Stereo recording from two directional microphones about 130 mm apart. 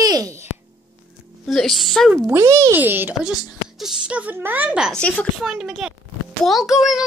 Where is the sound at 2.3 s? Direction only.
20° right (ahead or behind).